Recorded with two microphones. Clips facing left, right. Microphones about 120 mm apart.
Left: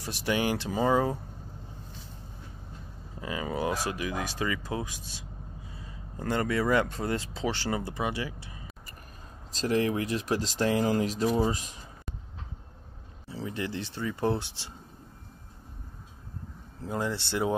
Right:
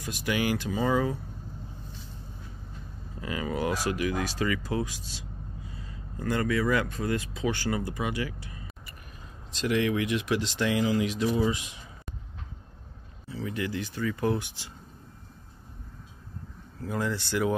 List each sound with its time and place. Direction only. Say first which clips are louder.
0.0 s speech: even; 30° left (ahead or behind)
3.2 s speech: right 1 dB; 25° left (ahead or behind)
9.5 s speech: even; 40° left (ahead or behind)
13.3 s speech: right 2 dB; 30° left (ahead or behind)
16.8 s speech: right 1 dB; 25° left (ahead or behind)